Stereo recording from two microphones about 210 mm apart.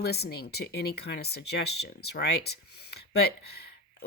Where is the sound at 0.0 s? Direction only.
50° left (ahead or behind).